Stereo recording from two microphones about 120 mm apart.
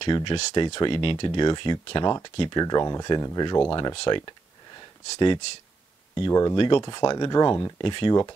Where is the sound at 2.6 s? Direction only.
30° left (ahead or behind).